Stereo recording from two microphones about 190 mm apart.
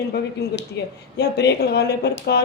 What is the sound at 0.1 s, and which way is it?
Speech, 60° left (ahead or behind).